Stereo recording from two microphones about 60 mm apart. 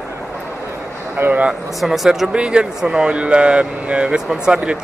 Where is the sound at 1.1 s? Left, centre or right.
Right.